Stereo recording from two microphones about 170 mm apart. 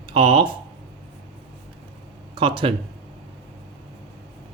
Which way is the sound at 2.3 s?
30° right (ahead or behind).